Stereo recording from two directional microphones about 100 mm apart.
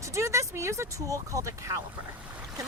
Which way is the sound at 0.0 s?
30° right (ahead or behind).